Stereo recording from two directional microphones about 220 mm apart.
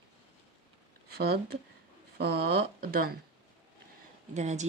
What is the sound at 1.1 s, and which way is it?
Speech, 45° right (ahead or behind).